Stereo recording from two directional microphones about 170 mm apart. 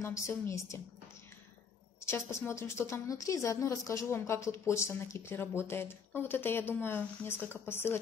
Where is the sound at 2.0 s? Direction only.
15° left (ahead or behind).